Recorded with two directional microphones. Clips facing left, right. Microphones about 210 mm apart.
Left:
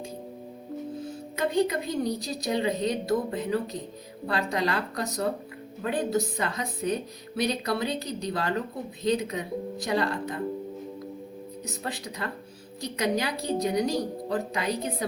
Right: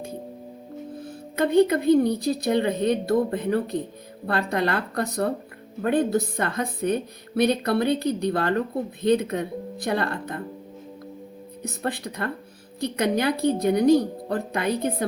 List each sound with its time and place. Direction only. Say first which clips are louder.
0.9 s a woman's voice: right 5 dB; 55° right (ahead or behind)
11.6 s a woman's voice: right 7 dB; 55° right (ahead or behind)